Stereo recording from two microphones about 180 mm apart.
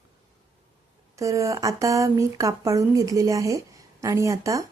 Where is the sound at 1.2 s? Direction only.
15° right (ahead or behind).